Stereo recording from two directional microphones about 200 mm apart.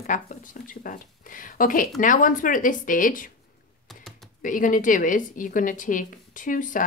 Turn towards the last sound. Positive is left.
turn(degrees=40)  # may be behind; listen again after turning